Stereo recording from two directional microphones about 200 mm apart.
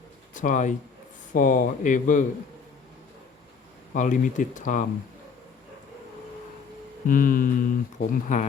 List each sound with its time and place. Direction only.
0.3 s speech: 40° left (ahead or behind)
3.9 s speech: 40° left (ahead or behind)
7.1 s a sound: 45° left (ahead or behind)